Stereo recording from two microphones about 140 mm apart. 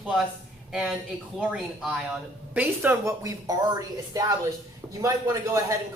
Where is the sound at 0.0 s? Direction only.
5° right (ahead or behind).